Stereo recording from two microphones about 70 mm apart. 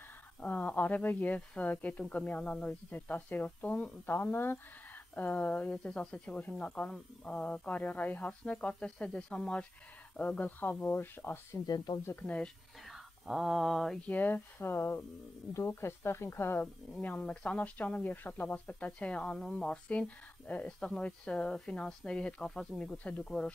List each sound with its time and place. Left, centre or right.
0.4 s speech: left
11.6 s speech: left
12.2 s speech: centre
12.8 s speech: centre
14.0 s speech: left
16.9 s speech: centre